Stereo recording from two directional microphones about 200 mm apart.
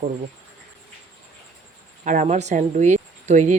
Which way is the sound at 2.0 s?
40° right (ahead or behind).